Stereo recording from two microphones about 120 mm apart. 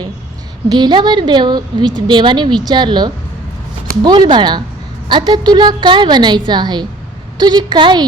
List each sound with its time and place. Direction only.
0.7 s a woman's voice: 35° right (ahead or behind)